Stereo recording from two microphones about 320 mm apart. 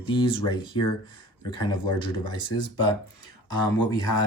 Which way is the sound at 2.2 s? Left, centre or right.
Centre.